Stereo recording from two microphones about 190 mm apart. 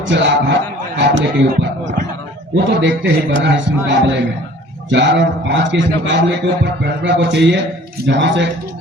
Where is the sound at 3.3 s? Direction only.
75° right (ahead or behind).